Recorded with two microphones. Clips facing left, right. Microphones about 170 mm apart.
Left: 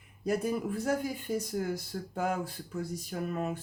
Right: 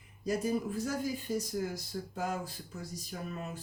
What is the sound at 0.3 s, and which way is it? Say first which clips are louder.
Speech: left 2 dB; 60° left (ahead or behind).